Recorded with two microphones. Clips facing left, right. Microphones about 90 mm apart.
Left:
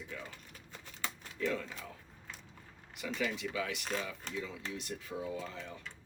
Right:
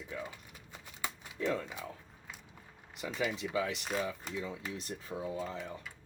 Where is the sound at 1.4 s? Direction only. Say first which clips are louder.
Right 2 dB; 20° right (ahead or behind).